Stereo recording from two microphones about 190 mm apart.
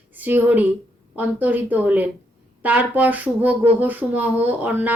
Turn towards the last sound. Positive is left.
turn(degrees=-10)  # may be behind; listen again after turning